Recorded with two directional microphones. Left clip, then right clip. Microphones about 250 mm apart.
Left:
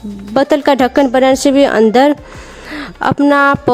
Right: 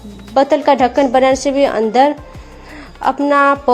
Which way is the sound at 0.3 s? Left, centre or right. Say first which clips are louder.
Left 1 dB; left.